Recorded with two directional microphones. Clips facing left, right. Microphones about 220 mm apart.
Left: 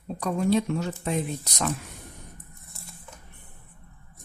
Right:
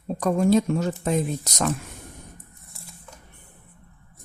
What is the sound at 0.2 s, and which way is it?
Speech, 45° right (ahead or behind).